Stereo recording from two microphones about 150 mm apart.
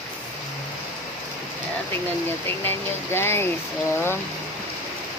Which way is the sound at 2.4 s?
15° left (ahead or behind).